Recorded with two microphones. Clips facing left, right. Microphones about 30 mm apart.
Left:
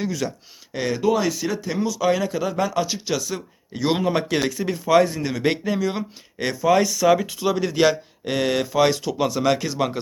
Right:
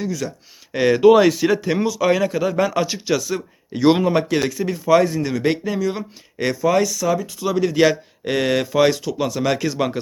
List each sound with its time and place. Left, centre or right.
0.0 s speech: centre
0.7 s speech: right
1.0 s speech: right
1.9 s speech: centre
6.9 s speech: left
7.4 s speech: centre